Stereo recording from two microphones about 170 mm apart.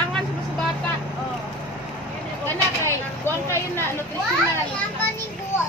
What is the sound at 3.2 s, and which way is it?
Speech, 15° left (ahead or behind).